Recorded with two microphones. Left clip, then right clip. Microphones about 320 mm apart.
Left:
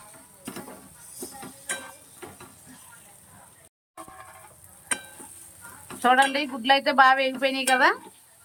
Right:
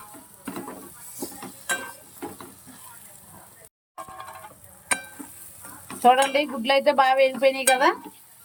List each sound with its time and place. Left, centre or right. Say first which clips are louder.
6.0 s speech: right 2 dB; centre